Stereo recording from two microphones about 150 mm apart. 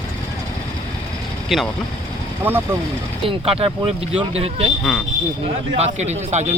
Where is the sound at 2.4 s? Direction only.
15° right (ahead or behind).